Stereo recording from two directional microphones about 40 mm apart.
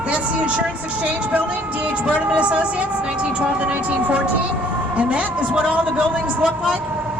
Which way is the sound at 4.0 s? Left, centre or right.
Right.